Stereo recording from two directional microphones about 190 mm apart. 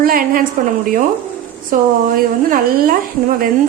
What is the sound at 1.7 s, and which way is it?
A woman's voice, 50° right (ahead or behind).